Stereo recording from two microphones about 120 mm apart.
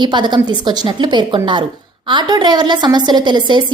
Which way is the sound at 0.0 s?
40° right (ahead or behind).